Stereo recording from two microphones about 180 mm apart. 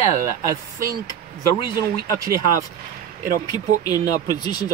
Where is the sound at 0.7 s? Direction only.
55° right (ahead or behind).